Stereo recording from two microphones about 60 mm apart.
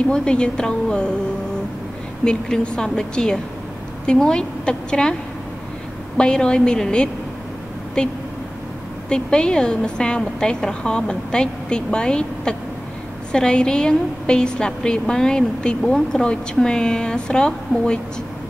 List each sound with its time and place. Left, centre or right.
0.1 s a woman's voice: centre
2.2 s a woman's voice: centre
6.1 s a woman's voice: centre